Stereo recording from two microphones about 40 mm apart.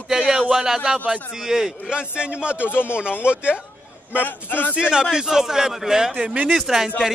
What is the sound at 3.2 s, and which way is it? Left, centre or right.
Speech, right.